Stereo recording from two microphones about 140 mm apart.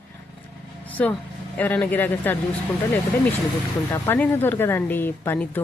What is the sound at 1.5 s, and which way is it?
Speech, 10° left (ahead or behind).